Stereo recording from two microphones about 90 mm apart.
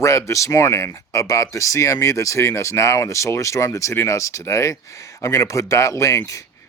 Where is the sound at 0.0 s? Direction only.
35° left (ahead or behind).